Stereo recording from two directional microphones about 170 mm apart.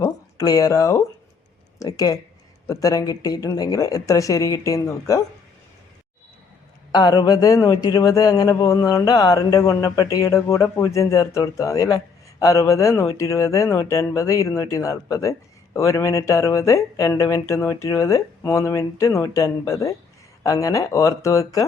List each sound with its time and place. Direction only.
0.0 s speech: 20° left (ahead or behind)
6.9 s a man's voice: 25° left (ahead or behind)